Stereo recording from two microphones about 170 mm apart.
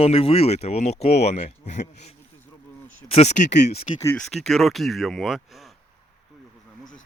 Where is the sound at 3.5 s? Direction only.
80° left.